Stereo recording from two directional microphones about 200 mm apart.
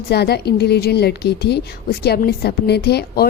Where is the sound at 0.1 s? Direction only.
55° left (ahead or behind).